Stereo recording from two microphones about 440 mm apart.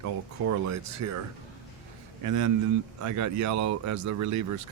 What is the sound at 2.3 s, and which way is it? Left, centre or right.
Speech, right.